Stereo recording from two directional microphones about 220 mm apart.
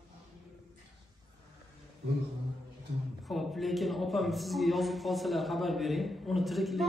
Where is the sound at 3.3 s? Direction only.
Centre (ahead or behind).